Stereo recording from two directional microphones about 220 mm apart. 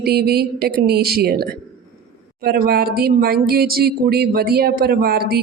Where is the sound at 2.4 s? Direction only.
45° right (ahead or behind).